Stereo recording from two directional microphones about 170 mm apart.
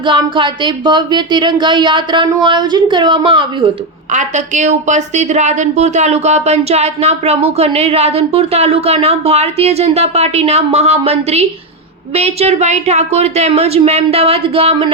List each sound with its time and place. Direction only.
0.0 s speech: 30° right (ahead or behind)
4.1 s a woman's voice: 45° right (ahead or behind)